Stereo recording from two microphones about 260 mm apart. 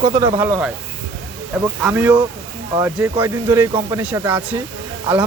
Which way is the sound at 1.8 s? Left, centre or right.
Centre.